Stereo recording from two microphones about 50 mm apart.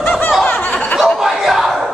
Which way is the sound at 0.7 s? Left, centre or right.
Left.